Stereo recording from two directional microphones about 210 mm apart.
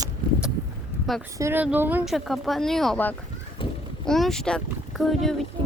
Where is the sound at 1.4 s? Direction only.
10° right (ahead or behind).